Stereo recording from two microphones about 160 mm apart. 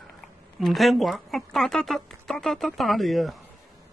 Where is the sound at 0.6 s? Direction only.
Centre (ahead or behind).